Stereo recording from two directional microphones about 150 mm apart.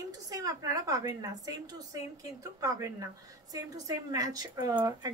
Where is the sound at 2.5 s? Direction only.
20° right (ahead or behind).